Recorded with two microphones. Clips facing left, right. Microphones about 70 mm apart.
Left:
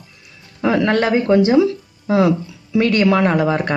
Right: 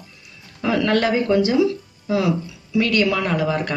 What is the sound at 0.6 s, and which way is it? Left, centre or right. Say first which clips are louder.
Speech: left 3 dB; left.